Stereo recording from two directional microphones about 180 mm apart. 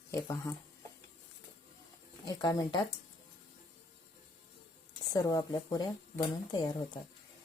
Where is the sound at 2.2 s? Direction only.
25° left (ahead or behind).